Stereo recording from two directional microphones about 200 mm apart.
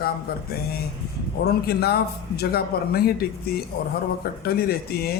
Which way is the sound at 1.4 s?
55° left (ahead or behind).